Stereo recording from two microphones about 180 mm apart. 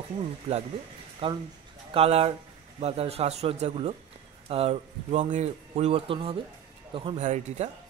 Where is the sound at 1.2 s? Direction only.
30° right (ahead or behind).